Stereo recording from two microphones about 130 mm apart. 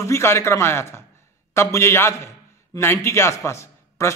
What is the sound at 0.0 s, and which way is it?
A man's voice, 20° left (ahead or behind).